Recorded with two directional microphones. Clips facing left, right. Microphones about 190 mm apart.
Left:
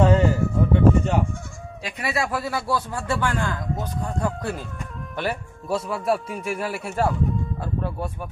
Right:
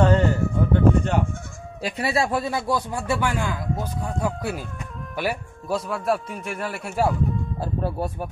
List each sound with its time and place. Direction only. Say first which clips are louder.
0.0 s a sound: left 1 dB; centre (ahead or behind)
1.8 s a man's voice: right 3 dB; 35° right (ahead or behind); by 7.2 s 5° right (ahead or behind)
7.6 s speech: right 2 dB; 35° right (ahead or behind)